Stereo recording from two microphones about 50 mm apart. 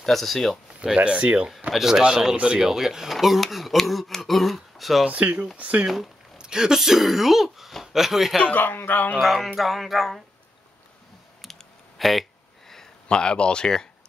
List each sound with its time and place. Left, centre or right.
0.0 s speech: centre
0.9 s speech: right
1.7 s speech: centre
5.0 s speech: right
6.3 s speech: centre
8.4 s speech: left
9.2 s speech: centre
11.4 s clicking: centre
12.0 s a sound: centre
13.1 s speech: centre